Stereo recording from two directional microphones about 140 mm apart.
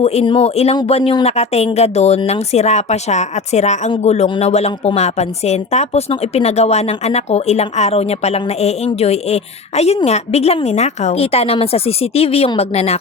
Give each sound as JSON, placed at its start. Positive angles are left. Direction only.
{"t": 0.0, "sound": "a woman's voice", "side_deg": 45}